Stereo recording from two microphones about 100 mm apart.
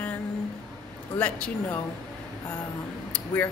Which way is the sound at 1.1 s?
15° left (ahead or behind).